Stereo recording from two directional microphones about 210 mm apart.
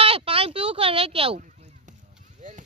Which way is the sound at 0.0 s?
25° right (ahead or behind).